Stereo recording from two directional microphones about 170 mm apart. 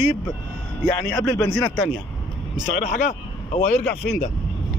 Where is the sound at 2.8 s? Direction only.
45° left (ahead or behind).